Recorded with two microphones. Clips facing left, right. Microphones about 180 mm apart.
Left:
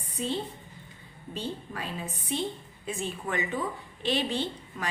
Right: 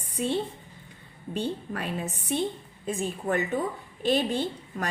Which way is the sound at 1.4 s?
60° right (ahead or behind).